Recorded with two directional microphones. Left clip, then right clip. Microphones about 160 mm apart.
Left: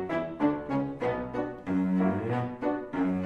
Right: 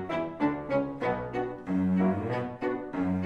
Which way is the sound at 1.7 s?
20° left (ahead or behind).